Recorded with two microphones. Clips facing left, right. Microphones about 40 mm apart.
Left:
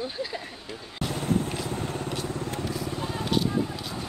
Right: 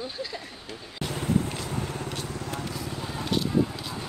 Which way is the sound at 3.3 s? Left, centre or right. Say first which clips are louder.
Right 1 dB; centre.